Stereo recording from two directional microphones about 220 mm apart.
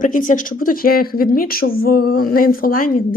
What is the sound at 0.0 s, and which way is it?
A woman's voice, 35° left (ahead or behind).